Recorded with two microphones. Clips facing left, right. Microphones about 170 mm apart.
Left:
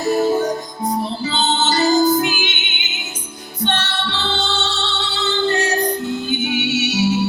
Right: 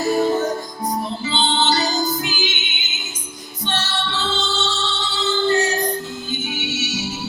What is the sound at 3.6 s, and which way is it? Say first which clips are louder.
Music: left 3 dB; 60° left (ahead or behind).